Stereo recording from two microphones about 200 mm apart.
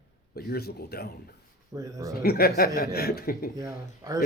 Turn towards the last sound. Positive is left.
turn(degrees=-15)  # may be behind; listen again after turning